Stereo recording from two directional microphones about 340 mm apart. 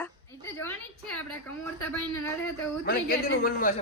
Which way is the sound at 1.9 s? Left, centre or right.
Centre.